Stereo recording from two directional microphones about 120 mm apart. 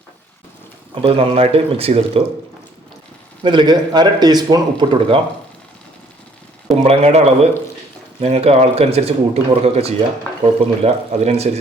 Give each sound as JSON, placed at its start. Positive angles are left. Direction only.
{"t": 1.0, "sound": "speech", "side_deg": -50}
{"t": 3.4, "sound": "speech", "side_deg": -40}
{"t": 6.8, "sound": "speech", "side_deg": -60}